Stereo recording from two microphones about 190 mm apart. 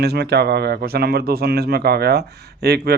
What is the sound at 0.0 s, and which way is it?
Speech, 60° right (ahead or behind).